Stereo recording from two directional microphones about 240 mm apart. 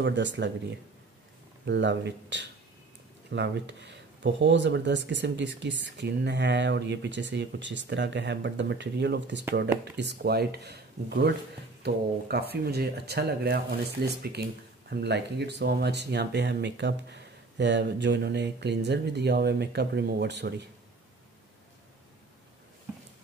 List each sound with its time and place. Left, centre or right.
0.0 s speech: right